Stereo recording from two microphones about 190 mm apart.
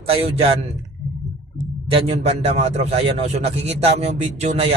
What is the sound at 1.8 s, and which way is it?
A man's voice, 30° right (ahead or behind).